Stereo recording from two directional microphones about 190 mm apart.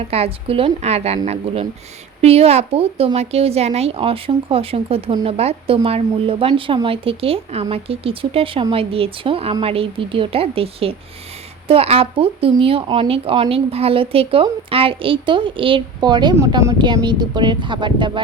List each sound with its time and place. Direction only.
0.0 s speech: 30° right (ahead or behind)